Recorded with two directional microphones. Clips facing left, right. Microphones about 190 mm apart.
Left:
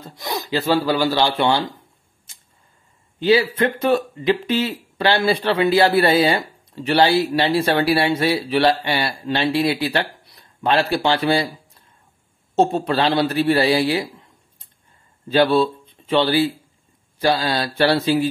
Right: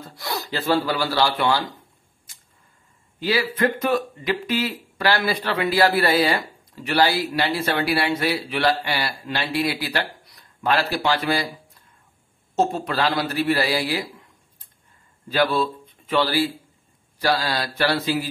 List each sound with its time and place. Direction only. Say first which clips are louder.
0.1 s speech: left 5 dB; 20° left (ahead or behind)
2.3 s a sound: left 3 dB; 25° left (ahead or behind)
3.2 s speech: left 5 dB; 25° left (ahead or behind)
12.5 s speech: left 4 dB; 30° left (ahead or behind)
15.2 s speech: left 5 dB; 30° left (ahead or behind)